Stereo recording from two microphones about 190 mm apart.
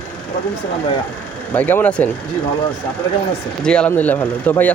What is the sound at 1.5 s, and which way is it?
Speech, 10° left (ahead or behind).